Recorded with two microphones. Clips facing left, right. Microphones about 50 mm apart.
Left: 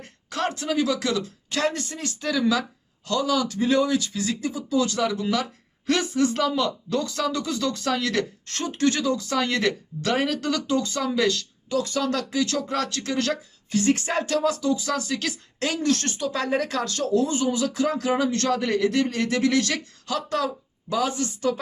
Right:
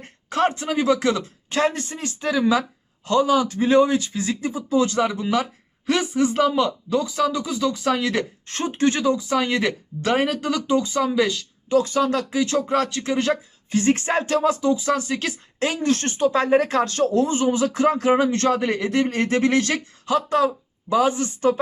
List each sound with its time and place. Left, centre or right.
0.0 s speech: right
11.7 s speech: right